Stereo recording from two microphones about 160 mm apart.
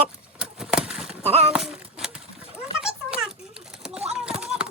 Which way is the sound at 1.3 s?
40° right (ahead or behind).